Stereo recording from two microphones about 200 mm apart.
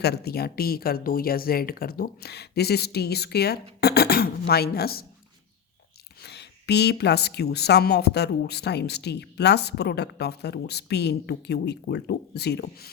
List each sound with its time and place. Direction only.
0.0 s speech: 55° left (ahead or behind)
6.2 s a woman's voice: 55° left (ahead or behind)